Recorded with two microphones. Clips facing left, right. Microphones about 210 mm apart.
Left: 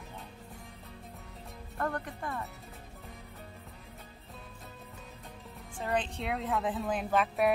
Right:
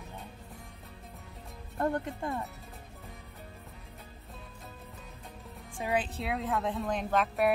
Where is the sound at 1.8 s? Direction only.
25° right (ahead or behind).